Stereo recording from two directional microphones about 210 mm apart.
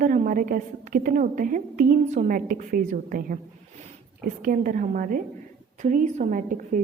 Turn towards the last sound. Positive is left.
turn(degrees=-40)  # may be behind; listen again after turning